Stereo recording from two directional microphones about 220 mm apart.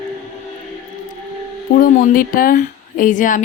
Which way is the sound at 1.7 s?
40° left (ahead or behind).